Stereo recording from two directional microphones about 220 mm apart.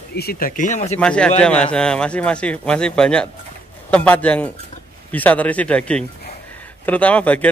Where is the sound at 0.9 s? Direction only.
5° left (ahead or behind).